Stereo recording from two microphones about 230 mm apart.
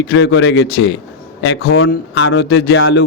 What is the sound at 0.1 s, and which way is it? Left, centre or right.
Speech, left.